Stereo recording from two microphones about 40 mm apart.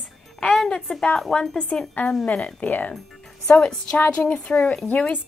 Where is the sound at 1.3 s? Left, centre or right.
Centre.